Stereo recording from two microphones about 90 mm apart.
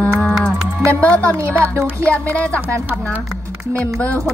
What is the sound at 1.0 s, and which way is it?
Speech, 15° left (ahead or behind).